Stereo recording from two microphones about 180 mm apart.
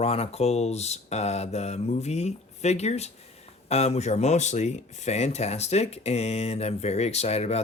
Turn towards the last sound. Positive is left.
turn(degrees=35)  # may be behind; listen again after turning